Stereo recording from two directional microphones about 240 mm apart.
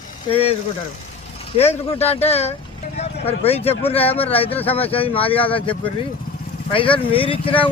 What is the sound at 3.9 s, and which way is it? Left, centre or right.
Speech, left.